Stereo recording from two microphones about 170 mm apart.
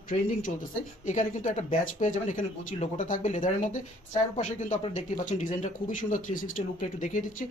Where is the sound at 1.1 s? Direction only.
45° left (ahead or behind).